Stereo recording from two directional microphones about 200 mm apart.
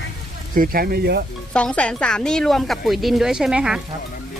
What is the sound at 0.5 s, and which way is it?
Speech, 45° right (ahead or behind).